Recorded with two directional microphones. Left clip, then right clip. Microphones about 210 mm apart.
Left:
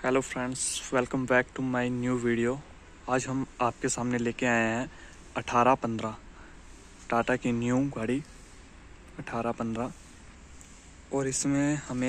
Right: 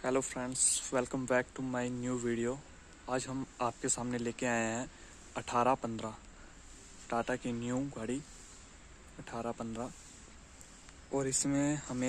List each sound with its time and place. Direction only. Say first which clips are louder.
0.0 s a man's voice: left 6 dB; centre (ahead or behind)
9.2 s a man's voice: left 8 dB; 5° left (ahead or behind)
11.1 s speech: left 5 dB; 5° right (ahead or behind)